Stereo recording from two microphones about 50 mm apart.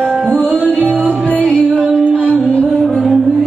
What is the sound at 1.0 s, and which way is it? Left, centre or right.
Music, left.